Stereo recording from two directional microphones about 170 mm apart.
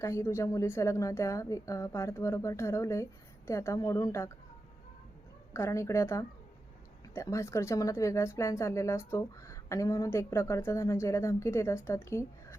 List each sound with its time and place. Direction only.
0.0 s speech: 15° left (ahead or behind)
5.5 s speech: 15° left (ahead or behind)